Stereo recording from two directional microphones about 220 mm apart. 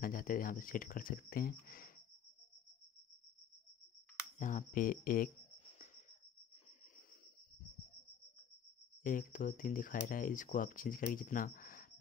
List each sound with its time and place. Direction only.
0.0 s speech: 40° left (ahead or behind)
4.4 s speech: 35° left (ahead or behind)
9.0 s speech: 35° left (ahead or behind)